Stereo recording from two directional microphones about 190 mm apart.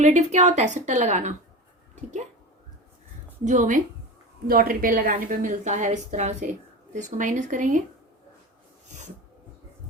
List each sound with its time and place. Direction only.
0.0 s a woman's voice: 40° right (ahead or behind)
3.4 s a woman's voice: 40° right (ahead or behind)